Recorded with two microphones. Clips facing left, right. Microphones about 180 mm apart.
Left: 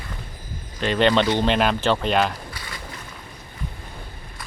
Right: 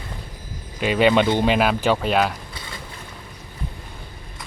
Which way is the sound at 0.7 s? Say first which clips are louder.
Right 2 dB; 5° right (ahead or behind).